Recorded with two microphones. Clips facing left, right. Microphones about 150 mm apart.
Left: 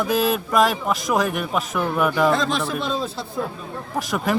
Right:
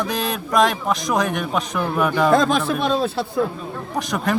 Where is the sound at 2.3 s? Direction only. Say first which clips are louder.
Right 4 dB; 50° right (ahead or behind).